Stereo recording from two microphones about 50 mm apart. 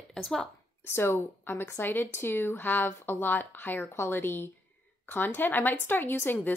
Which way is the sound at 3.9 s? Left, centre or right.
Left.